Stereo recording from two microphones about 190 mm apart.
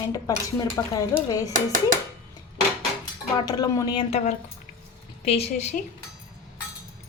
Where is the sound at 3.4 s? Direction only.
20° left (ahead or behind).